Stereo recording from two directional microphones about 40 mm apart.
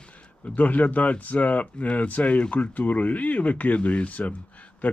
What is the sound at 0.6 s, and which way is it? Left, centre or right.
Speech, left.